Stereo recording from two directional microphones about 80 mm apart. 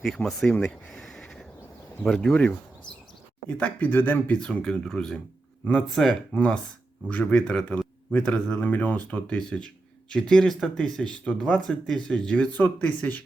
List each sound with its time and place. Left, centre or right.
0.3 s speech: centre
0.9 s a sound: centre
2.0 s speech: centre; by 4.4 s left
4.4 s speech: centre
6.3 s speech: centre